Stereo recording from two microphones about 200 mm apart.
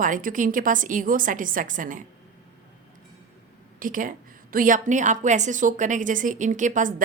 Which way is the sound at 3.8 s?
40° right (ahead or behind).